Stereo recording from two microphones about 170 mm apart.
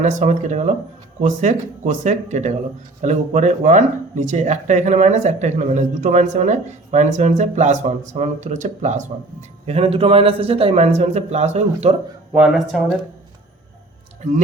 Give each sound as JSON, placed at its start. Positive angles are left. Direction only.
{"t": 0.0, "sound": "a man's voice", "side_deg": -45}